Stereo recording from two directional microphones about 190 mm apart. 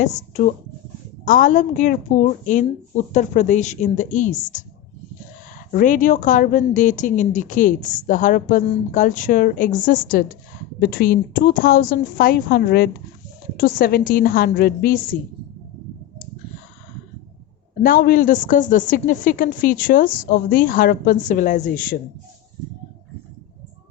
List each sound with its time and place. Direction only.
0.0 s speech: 40° left (ahead or behind)
5.7 s speech: 45° left (ahead or behind)
17.8 s speech: 50° left (ahead or behind)